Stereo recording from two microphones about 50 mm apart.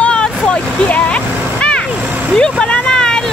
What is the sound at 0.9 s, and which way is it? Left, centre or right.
Vehicle, left.